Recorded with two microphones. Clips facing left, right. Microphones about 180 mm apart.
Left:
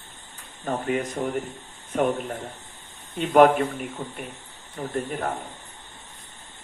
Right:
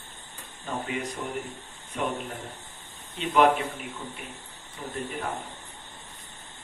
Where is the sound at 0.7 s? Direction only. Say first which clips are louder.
Left 6 dB; 40° left (ahead or behind).